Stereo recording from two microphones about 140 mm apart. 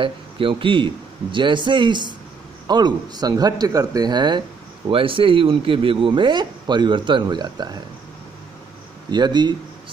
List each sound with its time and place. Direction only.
0.0 s speech: 40° right (ahead or behind)
9.1 s speech: 30° right (ahead or behind)